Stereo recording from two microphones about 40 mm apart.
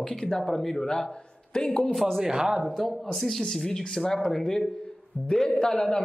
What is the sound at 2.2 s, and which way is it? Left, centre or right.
Speech, centre.